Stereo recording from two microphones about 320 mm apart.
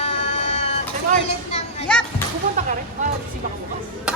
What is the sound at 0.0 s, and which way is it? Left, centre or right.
Music, left.